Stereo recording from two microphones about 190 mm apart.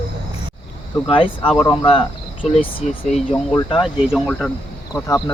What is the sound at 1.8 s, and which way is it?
Speech, 25° left (ahead or behind).